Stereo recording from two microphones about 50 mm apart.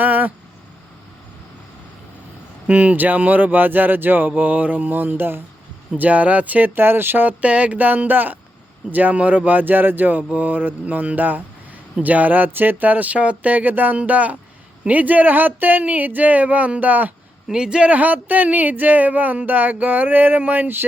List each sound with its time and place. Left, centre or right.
0.0 s a sound: right
2.6 s speech: right
4.3 s speech: right
6.0 s speech: right
6.7 s speech: right
17.5 s speech: centre
17.9 s speech: right